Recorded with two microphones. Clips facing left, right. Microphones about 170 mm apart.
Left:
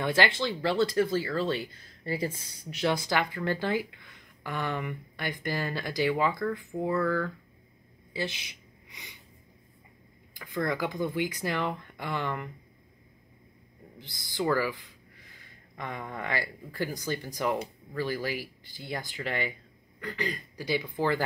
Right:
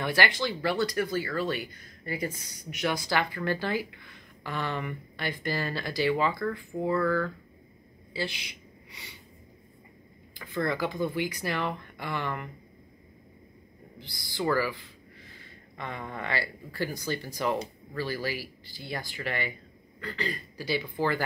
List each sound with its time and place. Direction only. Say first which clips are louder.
0.0 s speech: left 1 dB; 20° left (ahead or behind)
8.1 s a sound: even; 20° left (ahead or behind)
10.3 s speech: right 1 dB; 15° left (ahead or behind)
13.9 s speech: left 2 dB; 20° left (ahead or behind)